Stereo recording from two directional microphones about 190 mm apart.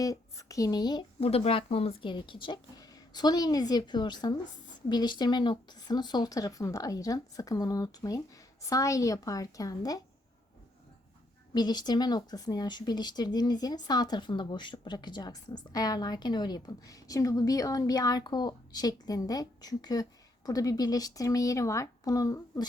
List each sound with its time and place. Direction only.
0.0 s a woman's voice: 20° left (ahead or behind)
11.5 s speech: 20° left (ahead or behind)